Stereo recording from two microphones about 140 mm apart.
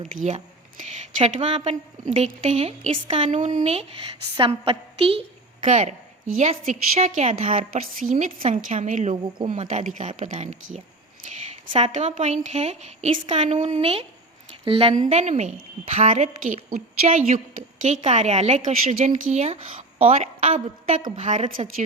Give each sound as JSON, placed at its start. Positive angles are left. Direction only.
{"t": 0.0, "sound": "a woman's voice", "side_deg": -65}
{"t": 0.3, "sound": "a woman's voice", "side_deg": -50}
{"t": 3.2, "sound": "a woman's voice", "side_deg": -60}
{"t": 4.4, "sound": "a woman's voice", "side_deg": -40}
{"t": 5.6, "sound": "a woman's voice", "side_deg": -60}
{"t": 15.1, "sound": "a woman's voice", "side_deg": -55}
{"t": 17.8, "sound": "a woman's voice", "side_deg": -55}